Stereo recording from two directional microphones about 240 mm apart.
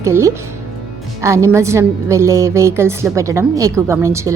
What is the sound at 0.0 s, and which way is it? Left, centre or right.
A woman's voice, centre.